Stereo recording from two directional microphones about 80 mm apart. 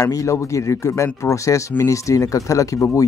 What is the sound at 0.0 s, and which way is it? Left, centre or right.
Speech, left.